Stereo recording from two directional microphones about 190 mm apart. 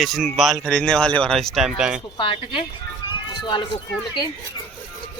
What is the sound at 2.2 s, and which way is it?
Speech, 25° left (ahead or behind).